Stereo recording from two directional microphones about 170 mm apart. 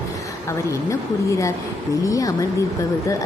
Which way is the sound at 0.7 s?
20° left (ahead or behind).